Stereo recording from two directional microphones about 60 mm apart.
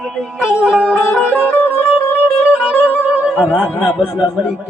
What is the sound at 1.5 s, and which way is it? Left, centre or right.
Music, left.